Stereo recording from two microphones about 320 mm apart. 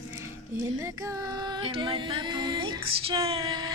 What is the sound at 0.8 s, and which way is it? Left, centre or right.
Music, centre.